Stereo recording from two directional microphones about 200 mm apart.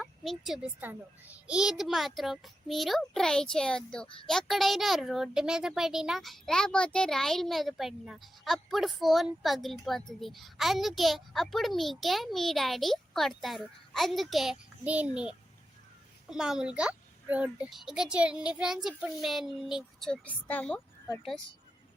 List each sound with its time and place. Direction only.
0.0 s speech: centre (ahead or behind)